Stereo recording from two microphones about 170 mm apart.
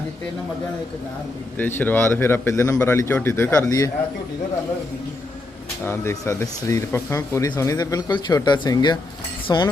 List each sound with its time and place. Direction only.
1.5 s a man's voice: 10° left (ahead or behind)
5.8 s speech: 15° left (ahead or behind)